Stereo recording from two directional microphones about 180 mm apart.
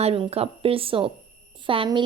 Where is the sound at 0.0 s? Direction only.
35° right (ahead or behind).